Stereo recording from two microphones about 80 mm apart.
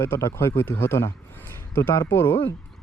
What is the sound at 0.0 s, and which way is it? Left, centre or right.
Speech, left.